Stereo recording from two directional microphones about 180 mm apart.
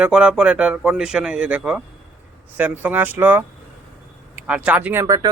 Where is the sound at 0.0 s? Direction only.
5° right (ahead or behind).